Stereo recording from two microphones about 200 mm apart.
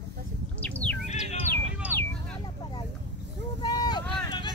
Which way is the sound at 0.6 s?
5° left (ahead or behind).